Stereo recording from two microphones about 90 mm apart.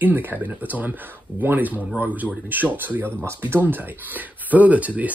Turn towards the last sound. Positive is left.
turn(degrees=-15)  # may be behind; listen again after turning